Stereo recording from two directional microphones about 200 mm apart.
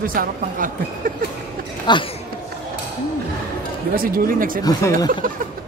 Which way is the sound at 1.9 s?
20° left (ahead or behind).